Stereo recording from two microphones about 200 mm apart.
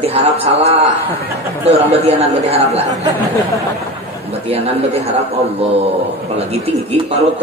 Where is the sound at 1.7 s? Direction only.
30° right (ahead or behind).